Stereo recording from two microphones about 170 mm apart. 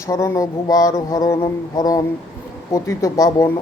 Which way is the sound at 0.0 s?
20° left (ahead or behind).